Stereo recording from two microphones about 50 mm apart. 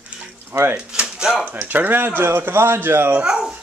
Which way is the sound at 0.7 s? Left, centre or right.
Right.